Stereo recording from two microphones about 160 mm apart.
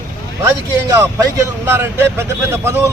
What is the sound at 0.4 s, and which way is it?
Speech, 20° right (ahead or behind).